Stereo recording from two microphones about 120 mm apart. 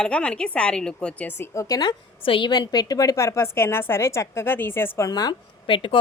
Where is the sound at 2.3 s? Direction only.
40° left (ahead or behind); by 5.1 s 20° left (ahead or behind).